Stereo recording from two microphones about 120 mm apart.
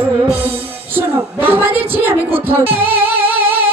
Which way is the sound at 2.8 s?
15° right (ahead or behind).